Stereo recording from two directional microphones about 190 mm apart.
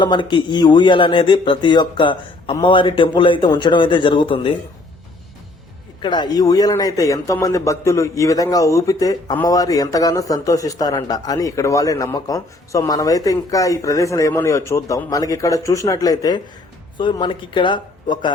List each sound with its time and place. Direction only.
0.0 s speech: 25° left (ahead or behind)
6.0 s a man's voice: 25° left (ahead or behind)